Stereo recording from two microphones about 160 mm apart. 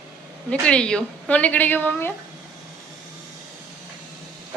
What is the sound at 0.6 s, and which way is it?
A woman's voice, 5° left (ahead or behind).